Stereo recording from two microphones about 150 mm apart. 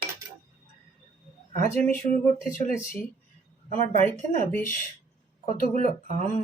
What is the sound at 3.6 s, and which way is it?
Speech, 55° right (ahead or behind).